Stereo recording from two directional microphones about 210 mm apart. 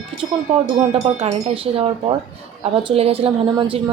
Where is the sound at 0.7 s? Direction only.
30° right (ahead or behind).